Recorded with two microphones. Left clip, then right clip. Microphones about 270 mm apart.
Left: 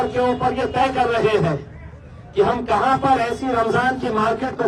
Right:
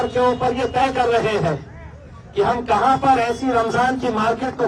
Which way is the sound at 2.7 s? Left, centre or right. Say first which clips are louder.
Right 2 dB; right.